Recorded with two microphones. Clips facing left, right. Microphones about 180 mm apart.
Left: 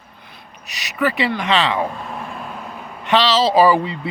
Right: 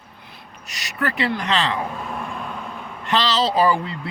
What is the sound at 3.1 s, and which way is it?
Speech, 75° left (ahead or behind).